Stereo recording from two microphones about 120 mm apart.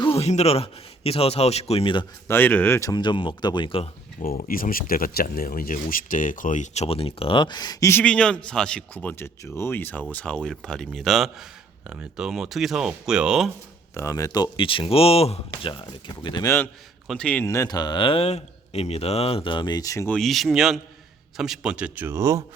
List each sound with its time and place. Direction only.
0.0 s speech: 55° left (ahead or behind)
2.2 s speech: 15° left (ahead or behind)
2.9 s speech: 40° left (ahead or behind)
4.2 s speech: 90° left
5.7 s speech: 90° left
6.8 s speech: 55° left (ahead or behind); by 7.9 s 30° left (ahead or behind)
7.9 s speech: 10° left (ahead or behind)
13.9 s speech: 25° left (ahead or behind)
14.6 s speech: 45° left (ahead or behind)
15.7 s speech: 40° left (ahead or behind)
16.4 s speech: 25° left (ahead or behind)
17.1 s speech: 10° left (ahead or behind)
17.4 s speech: 25° left (ahead or behind)
20.1 s a man's voice: 5° left (ahead or behind); by 22.4 s 25° right (ahead or behind)